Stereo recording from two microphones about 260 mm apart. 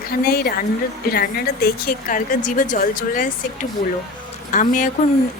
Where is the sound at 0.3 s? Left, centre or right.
Left.